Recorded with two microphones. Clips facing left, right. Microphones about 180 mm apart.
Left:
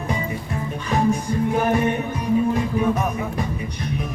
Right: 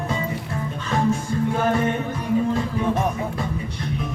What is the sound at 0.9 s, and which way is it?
Music, 15° left (ahead or behind).